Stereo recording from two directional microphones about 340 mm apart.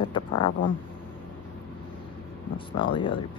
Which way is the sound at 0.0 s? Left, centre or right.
Centre.